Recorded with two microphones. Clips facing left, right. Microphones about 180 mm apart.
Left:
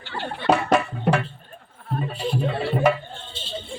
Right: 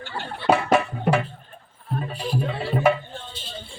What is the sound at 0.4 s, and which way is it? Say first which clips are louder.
Music: even; 5° right (ahead or behind).